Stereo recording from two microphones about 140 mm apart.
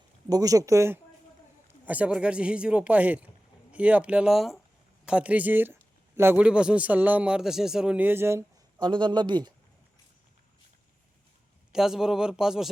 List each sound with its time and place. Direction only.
0.3 s speech: 25° right (ahead or behind)
1.9 s a man's voice: 10° right (ahead or behind)
8.8 s a man's voice: 35° right (ahead or behind)
11.7 s a man's voice: 5° right (ahead or behind)